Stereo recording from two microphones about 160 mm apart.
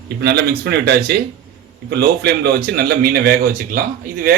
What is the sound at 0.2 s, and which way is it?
A man's voice, 90° right.